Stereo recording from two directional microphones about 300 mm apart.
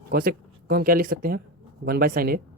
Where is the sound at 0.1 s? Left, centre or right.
Right.